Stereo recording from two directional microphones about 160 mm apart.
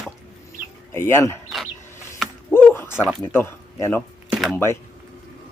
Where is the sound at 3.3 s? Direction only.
15° left (ahead or behind).